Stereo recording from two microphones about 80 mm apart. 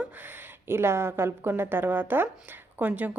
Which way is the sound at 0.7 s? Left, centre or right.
Right.